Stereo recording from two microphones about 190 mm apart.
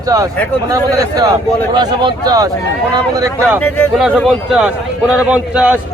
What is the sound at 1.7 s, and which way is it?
Speech, 25° right (ahead or behind).